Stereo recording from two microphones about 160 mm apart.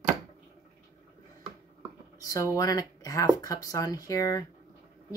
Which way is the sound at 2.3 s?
20° left (ahead or behind).